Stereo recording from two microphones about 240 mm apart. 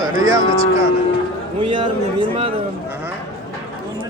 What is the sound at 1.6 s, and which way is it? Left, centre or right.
Speech, right.